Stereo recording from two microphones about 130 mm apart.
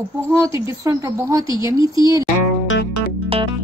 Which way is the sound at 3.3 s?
45° right (ahead or behind).